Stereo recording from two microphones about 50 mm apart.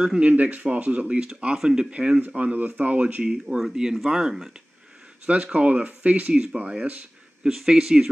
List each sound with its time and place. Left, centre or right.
0.2 s speech: right
2.2 s speech: right
3.3 s speech: centre
5.2 s speech: right
6.4 s speech: centre
7.5 s speech: centre